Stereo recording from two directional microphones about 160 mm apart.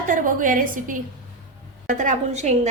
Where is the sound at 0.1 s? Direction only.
55° right (ahead or behind).